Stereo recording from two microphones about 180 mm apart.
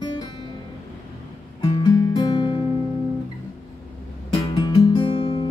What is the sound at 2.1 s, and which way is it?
Music, 25° left (ahead or behind).